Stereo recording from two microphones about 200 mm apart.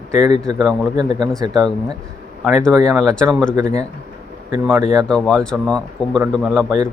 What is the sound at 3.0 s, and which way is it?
Speech, 5° left (ahead or behind).